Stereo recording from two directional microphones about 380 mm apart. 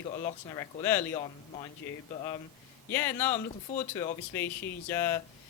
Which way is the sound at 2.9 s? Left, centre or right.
Centre.